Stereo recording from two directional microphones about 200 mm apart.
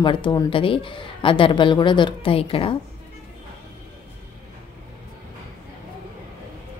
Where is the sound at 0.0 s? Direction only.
25° left (ahead or behind).